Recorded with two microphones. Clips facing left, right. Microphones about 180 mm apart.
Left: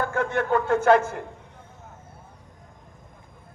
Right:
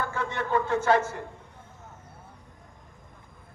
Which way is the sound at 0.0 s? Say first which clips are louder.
Left 6 dB; 55° left (ahead or behind).